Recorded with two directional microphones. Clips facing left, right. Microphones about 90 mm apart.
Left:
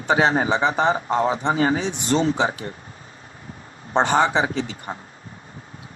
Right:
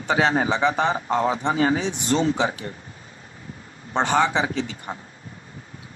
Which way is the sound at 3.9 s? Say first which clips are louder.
Left 2 dB; 30° left (ahead or behind).